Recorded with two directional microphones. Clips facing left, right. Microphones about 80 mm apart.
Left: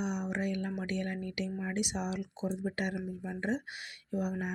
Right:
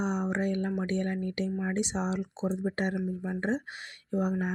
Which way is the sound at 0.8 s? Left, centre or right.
Right.